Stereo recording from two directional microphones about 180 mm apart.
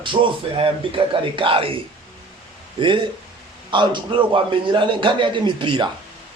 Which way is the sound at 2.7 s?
25° right (ahead or behind).